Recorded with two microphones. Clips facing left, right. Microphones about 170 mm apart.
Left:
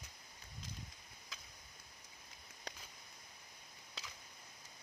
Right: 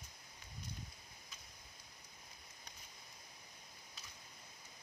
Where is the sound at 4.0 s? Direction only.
90° left.